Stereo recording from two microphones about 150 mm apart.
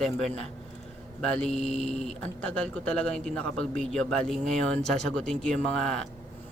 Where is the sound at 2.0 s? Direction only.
5° left (ahead or behind).